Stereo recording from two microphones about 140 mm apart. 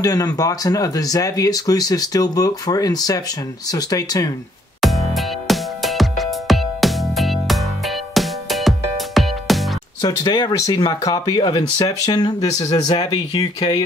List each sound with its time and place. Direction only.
0.0 s speech: 25° left (ahead or behind)
4.8 s music: centre (ahead or behind)
10.0 s speech: 30° left (ahead or behind)